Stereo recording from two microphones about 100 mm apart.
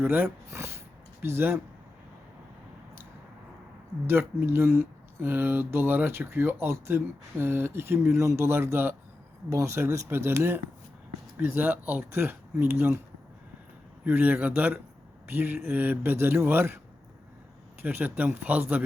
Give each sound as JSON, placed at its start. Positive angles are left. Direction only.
{"t": 0.0, "sound": "speech", "side_deg": -20}
{"t": 4.0, "sound": "speech", "side_deg": -25}
{"t": 14.0, "sound": "speech", "side_deg": -15}
{"t": 17.8, "sound": "speech", "side_deg": -15}